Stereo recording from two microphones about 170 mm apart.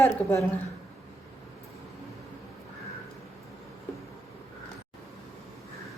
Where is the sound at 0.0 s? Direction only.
15° left (ahead or behind).